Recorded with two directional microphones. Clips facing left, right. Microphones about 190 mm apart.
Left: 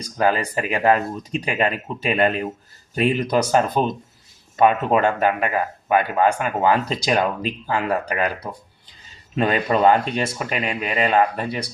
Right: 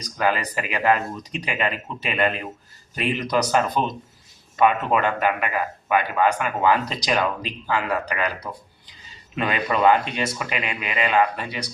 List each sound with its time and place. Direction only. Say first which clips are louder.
0.0 s a man's voice: left 3 dB; 35° left (ahead or behind)